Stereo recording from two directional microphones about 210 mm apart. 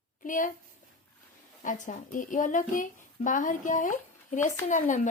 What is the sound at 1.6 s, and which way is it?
A woman's voice, 35° left (ahead or behind).